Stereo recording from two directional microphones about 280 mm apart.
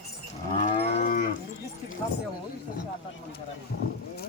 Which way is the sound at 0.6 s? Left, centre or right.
Left.